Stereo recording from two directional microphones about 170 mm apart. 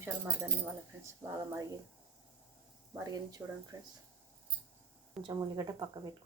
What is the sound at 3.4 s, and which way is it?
Speech, 15° right (ahead or behind).